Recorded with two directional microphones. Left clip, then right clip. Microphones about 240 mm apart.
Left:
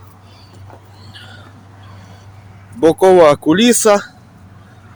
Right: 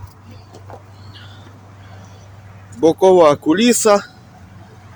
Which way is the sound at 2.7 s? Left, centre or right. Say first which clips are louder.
Left 2 dB; centre.